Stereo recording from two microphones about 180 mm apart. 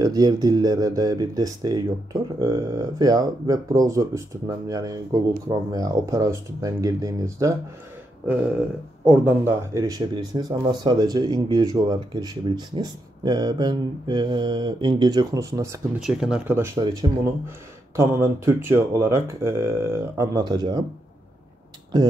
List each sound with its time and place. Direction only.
0.0 s speech: 20° right (ahead or behind)
9.0 s speech: 10° right (ahead or behind)
16.0 s speech: 5° right (ahead or behind)
16.7 s speech: 25° right (ahead or behind)